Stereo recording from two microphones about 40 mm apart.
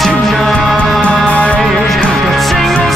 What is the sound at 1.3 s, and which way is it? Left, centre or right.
Music, left.